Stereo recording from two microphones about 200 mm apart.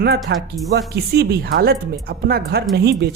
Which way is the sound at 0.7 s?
50° right (ahead or behind).